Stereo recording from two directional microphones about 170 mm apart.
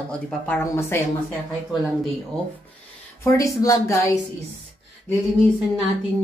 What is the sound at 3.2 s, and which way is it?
Speech, 20° left (ahead or behind).